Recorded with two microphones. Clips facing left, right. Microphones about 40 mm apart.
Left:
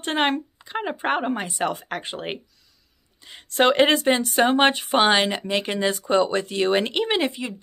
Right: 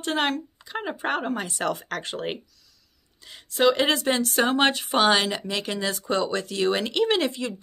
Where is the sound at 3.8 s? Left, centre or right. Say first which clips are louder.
Left 3 dB; left.